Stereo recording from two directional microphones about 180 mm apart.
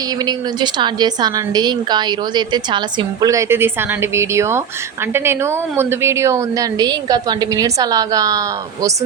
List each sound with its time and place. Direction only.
0.3 s a woman's voice: 25° right (ahead or behind)